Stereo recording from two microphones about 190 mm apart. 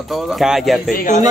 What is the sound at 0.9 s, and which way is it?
Speech, 45° left (ahead or behind).